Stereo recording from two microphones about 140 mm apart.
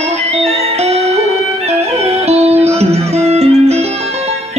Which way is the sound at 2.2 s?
50° right (ahead or behind).